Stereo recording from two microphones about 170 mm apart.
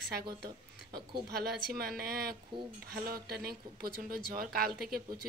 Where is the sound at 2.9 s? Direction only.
60° right (ahead or behind).